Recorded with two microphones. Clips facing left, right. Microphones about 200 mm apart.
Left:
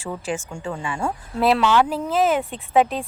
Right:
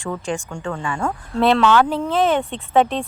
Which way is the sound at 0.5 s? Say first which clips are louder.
Right 2 dB; 25° left (ahead or behind).